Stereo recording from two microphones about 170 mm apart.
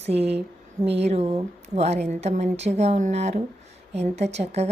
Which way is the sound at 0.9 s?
40° right (ahead or behind).